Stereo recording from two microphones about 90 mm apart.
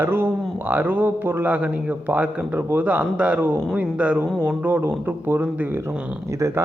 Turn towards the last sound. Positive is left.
turn(degrees=-20)  # may be behind; listen again after turning